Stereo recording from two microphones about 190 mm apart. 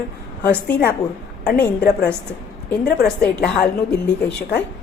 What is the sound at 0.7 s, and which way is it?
A woman's voice, 55° left (ahead or behind).